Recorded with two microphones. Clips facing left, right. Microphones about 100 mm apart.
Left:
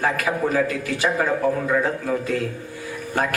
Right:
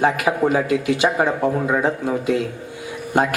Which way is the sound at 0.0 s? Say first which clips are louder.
Right 4 dB; 20° right (ahead or behind).